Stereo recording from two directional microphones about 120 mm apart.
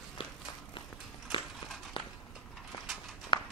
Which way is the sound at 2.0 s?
45° left (ahead or behind).